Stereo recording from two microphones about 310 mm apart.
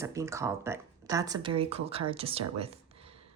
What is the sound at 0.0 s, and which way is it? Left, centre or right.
Speech, centre.